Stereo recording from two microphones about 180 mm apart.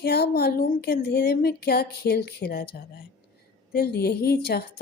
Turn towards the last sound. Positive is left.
turn(degrees=60)  # may be behind; listen again after turning